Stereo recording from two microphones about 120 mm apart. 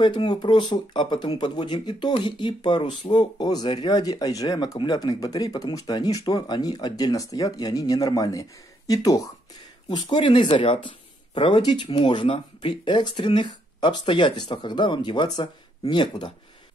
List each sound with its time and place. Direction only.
0.0 s speech: 40° left (ahead or behind)
9.8 s speech: 40° left (ahead or behind)